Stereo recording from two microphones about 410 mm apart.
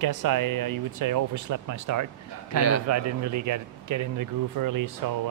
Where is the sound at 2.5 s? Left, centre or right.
Left.